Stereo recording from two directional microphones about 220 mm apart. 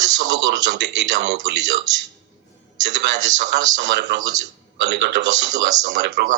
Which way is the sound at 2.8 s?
50° right (ahead or behind).